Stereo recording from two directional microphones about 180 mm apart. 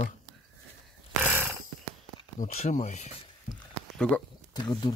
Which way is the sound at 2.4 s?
40° left (ahead or behind).